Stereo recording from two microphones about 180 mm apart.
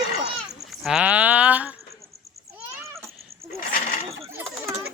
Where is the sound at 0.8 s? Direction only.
5° right (ahead or behind).